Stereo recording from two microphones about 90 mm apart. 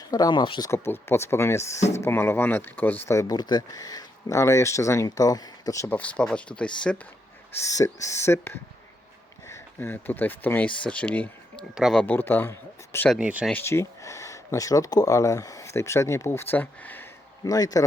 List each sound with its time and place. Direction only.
0.1 s speech: 45° left (ahead or behind)
0.7 s speech: 30° left (ahead or behind)
3.1 s speech: 35° left (ahead or behind)
3.3 s speech: 45° left (ahead or behind)
4.3 s speech: 35° left (ahead or behind)
5.9 s speech: 15° left (ahead or behind)
7.6 s speech: 35° left (ahead or behind); by 11.6 s 15° left (ahead or behind)
11.7 s speech: 5° right (ahead or behind)
11.9 s speech: 20° left (ahead or behind)
13.1 s speech: 15° right (ahead or behind)
13.5 s speech: 25° left (ahead or behind)
17.4 s speech: 40° left (ahead or behind)